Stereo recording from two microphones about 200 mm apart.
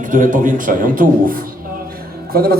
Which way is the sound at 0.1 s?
40° right (ahead or behind).